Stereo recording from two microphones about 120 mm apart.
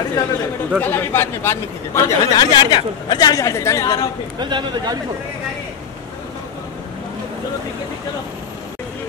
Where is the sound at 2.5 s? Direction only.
40° left (ahead or behind).